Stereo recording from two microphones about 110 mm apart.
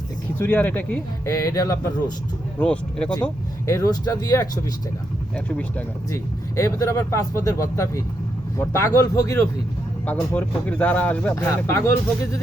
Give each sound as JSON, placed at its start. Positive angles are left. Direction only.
{"t": 0.3, "sound": "speech", "side_deg": 15}
{"t": 1.2, "sound": "speech", "side_deg": 30}
{"t": 2.6, "sound": "speech", "side_deg": 10}
{"t": 3.7, "sound": "speech", "side_deg": 35}
{"t": 5.5, "sound": "speech", "side_deg": 10}
{"t": 6.6, "sound": "speech", "side_deg": 30}
{"t": 10.1, "sound": "speech", "side_deg": 15}